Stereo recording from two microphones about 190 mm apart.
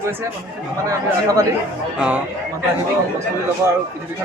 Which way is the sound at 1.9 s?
5° right (ahead or behind).